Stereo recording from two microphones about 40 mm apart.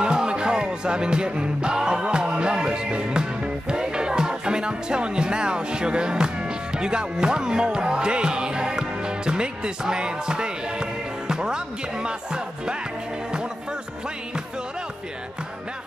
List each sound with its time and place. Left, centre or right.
0.0 s music: right